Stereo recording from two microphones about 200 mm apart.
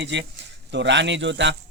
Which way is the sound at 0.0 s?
60° right (ahead or behind).